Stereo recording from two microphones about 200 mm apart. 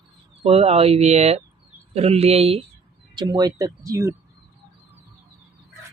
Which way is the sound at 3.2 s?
20° right (ahead or behind).